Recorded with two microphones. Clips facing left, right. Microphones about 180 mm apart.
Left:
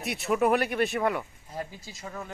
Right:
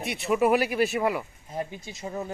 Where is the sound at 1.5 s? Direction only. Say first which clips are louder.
Right 4 dB; 20° right (ahead or behind).